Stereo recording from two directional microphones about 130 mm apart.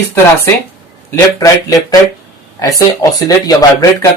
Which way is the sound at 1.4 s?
25° left (ahead or behind).